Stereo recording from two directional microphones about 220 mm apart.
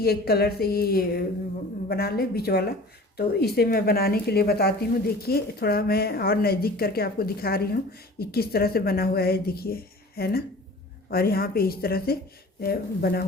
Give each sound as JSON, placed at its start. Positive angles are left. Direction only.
{"t": 0.0, "sound": "speech", "side_deg": 45}